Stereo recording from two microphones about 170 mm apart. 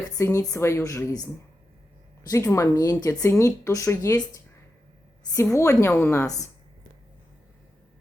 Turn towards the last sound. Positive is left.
turn(degrees=20)  # may be behind; listen again after turning